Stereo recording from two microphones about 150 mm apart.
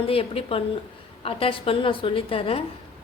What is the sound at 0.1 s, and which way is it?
A woman's voice, 40° left (ahead or behind).